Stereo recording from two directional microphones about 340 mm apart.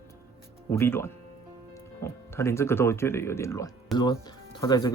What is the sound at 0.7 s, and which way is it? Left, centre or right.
Speech, centre.